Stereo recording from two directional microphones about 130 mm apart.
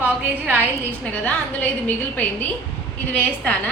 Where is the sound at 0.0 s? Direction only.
15° right (ahead or behind).